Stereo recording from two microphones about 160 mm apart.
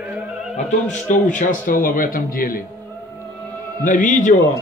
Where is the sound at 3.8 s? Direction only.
55° left (ahead or behind).